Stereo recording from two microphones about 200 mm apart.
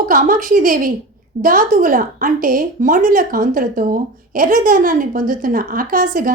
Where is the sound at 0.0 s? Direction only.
45° right (ahead or behind).